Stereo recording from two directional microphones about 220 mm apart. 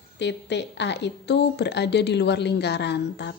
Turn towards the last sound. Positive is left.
turn(degrees=50)  # may be behind; listen again after turning